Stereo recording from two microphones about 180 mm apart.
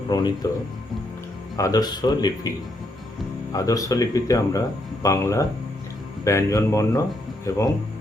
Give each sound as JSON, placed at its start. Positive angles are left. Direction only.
{"t": 0.1, "sound": "speech", "side_deg": 25}
{"t": 1.5, "sound": "speech", "side_deg": 20}
{"t": 3.5, "sound": "speech", "side_deg": 20}